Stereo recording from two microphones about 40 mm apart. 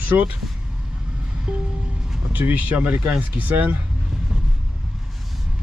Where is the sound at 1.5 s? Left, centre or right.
Right.